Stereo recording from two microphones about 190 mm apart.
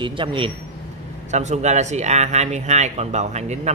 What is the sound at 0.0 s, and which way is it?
Speech, 25° right (ahead or behind).